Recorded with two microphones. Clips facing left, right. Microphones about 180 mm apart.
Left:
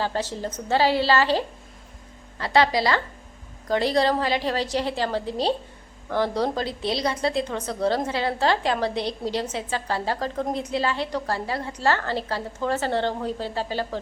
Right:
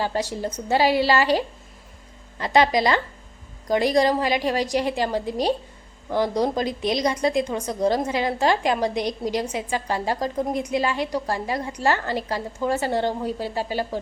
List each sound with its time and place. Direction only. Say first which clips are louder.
0.0 s a woman's voice: right 2 dB; 15° right (ahead or behind)